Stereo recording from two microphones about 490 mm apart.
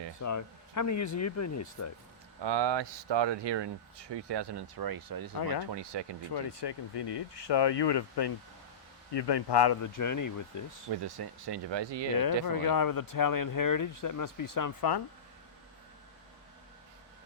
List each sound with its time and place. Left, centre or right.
0.2 s speech: left
2.4 s speech: right
5.7 s speech: right
6.3 s speech: left
11.0 s speech: right
12.5 s speech: left